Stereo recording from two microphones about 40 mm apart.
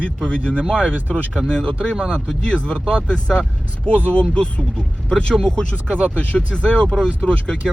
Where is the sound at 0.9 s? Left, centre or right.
Right.